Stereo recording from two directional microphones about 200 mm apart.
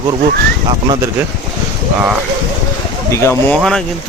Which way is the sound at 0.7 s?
25° right (ahead or behind).